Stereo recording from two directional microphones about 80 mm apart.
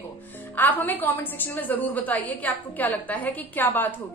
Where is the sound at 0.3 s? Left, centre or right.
Left.